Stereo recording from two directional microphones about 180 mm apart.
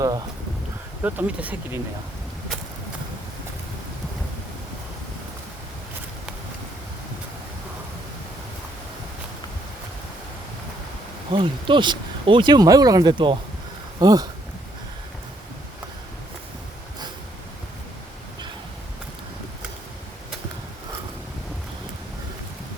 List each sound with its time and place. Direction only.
1.0 s speech: 10° right (ahead or behind)
11.3 s speech: 25° right (ahead or behind)